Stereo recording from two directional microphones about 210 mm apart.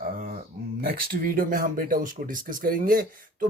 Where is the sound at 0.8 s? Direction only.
45° right (ahead or behind).